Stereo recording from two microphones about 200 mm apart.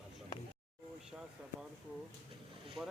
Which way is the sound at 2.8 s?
Centre (ahead or behind).